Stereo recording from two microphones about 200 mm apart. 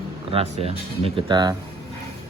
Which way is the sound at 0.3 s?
30° right (ahead or behind).